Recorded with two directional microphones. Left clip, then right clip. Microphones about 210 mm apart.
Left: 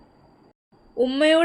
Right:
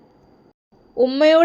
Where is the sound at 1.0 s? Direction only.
5° right (ahead or behind).